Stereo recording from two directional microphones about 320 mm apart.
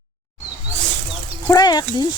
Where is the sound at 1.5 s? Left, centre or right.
Centre.